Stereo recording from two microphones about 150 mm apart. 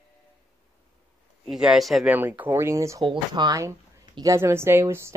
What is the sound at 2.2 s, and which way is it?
A woman's voice, 10° right (ahead or behind).